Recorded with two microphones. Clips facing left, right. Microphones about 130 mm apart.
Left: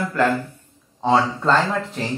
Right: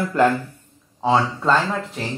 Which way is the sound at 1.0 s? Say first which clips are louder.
Left 1 dB; centre (ahead or behind).